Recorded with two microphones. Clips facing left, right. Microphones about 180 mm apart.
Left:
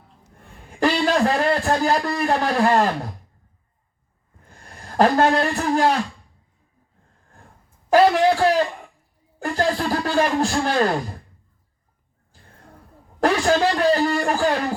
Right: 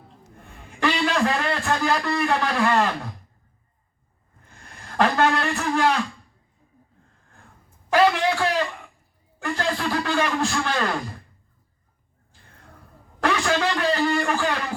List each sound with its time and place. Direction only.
0.8 s a man's voice: 35° left (ahead or behind)
4.7 s a man's voice: 40° left (ahead or behind)
7.9 s a sound: 40° left (ahead or behind)
9.4 s speech: 40° left (ahead or behind)
13.1 s a man's voice: 40° left (ahead or behind)